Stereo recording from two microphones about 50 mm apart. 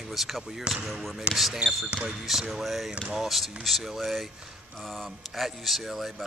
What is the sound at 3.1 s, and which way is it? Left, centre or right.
A man's voice, centre.